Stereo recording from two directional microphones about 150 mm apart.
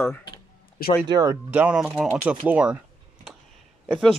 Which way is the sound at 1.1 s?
25° right (ahead or behind).